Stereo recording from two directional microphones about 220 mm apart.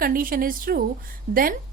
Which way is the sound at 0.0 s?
40° right (ahead or behind).